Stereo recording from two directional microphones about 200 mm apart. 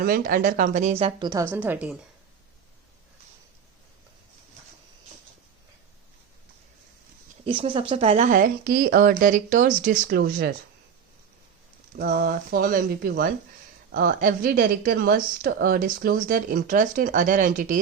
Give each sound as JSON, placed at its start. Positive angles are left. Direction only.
{"t": 0.0, "sound": "a woman's voice", "side_deg": -45}
{"t": 1.5, "sound": "a woman's voice", "side_deg": -10}
{"t": 7.4, "sound": "a woman's voice", "side_deg": -25}
{"t": 11.9, "sound": "speech", "side_deg": -50}